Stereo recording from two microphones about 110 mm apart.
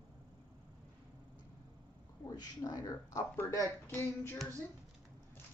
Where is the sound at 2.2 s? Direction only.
35° left (ahead or behind).